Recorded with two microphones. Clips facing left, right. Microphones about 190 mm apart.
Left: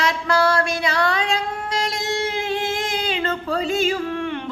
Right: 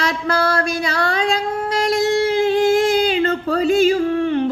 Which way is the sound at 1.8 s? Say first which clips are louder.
Right 9 dB; 40° right (ahead or behind).